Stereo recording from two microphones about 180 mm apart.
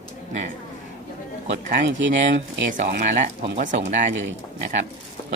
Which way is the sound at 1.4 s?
80° right.